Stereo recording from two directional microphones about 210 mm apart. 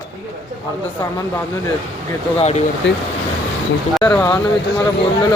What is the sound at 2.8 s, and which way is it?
Speech, 60° left (ahead or behind).